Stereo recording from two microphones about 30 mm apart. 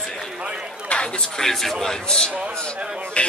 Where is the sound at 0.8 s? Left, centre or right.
Left.